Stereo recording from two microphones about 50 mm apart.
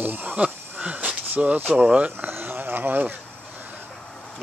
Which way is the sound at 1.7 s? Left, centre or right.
Right.